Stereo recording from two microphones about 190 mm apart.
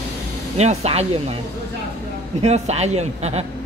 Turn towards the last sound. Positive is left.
turn(degrees=-35)  # may be behind; listen again after turning